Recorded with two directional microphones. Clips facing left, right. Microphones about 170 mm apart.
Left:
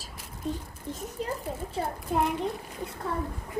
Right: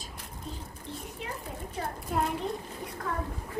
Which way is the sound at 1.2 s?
40° left (ahead or behind).